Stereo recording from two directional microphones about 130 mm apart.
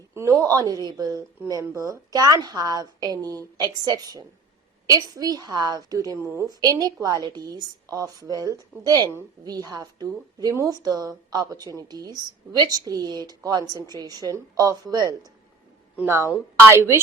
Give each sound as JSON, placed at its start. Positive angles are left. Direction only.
{"t": 0.1, "sound": "a woman's voice", "side_deg": -25}